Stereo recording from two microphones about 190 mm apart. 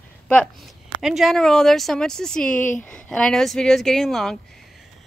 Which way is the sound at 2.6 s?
45° left (ahead or behind).